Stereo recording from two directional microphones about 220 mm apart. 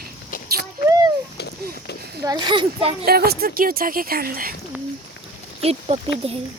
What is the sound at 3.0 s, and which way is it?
Speech, 45° right (ahead or behind).